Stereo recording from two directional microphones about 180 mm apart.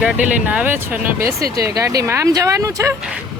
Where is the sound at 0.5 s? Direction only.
10° right (ahead or behind).